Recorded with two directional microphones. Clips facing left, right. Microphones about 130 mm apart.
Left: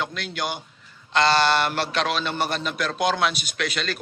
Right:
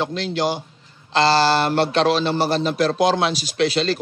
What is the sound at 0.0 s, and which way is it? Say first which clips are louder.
A man's voice: right 7 dB; 30° right (ahead or behind).